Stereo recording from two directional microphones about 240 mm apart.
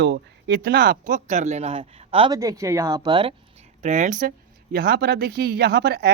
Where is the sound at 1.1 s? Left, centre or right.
Right.